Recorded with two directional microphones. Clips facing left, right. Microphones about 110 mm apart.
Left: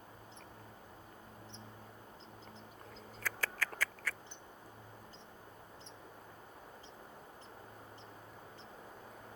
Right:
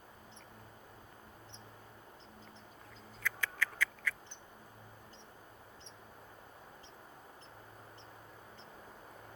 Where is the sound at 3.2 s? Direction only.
40° left (ahead or behind).